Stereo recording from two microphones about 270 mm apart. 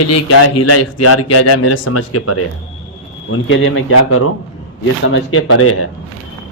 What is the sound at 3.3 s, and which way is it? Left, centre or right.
Speech, left.